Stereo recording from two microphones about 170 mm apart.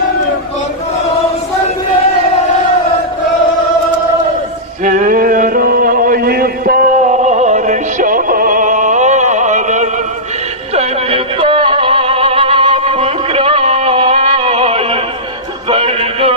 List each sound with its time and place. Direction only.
4.8 s mantra: 50° right (ahead or behind)
10.7 s music: 35° right (ahead or behind)